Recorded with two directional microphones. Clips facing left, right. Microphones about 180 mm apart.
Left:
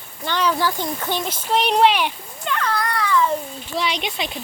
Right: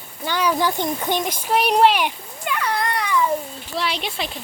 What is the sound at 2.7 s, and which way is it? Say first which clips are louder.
Babbling: left 2 dB; 20° right (ahead or behind).